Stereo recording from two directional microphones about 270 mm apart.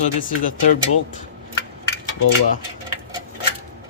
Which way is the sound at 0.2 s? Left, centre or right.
Left.